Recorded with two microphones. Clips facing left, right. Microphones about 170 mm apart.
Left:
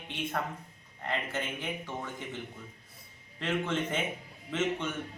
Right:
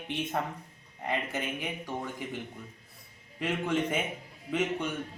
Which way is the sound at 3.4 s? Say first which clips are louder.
Right 2 dB; 10° right (ahead or behind).